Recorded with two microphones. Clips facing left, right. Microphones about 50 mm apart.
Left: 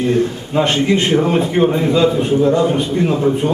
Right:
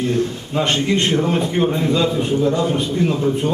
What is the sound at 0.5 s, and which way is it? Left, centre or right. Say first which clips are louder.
A man's voice: left 4 dB; centre.